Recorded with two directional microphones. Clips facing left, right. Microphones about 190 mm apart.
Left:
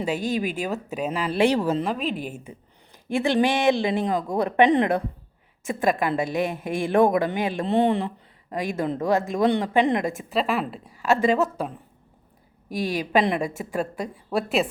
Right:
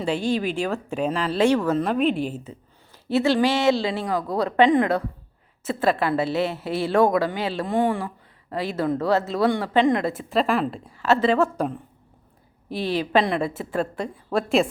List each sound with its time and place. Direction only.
0.6 s a woman's voice: 5° left (ahead or behind)
1.8 s a woman's voice: centre (ahead or behind)
2.2 s a woman's voice: 10° left (ahead or behind)
12.6 s a woman's voice: 10° left (ahead or behind)